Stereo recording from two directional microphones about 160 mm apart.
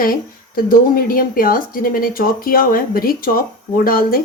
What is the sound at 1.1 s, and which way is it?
Speech, 65° left (ahead or behind).